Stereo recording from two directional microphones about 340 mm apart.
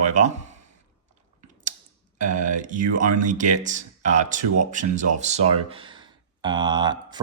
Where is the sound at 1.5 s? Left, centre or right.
Right.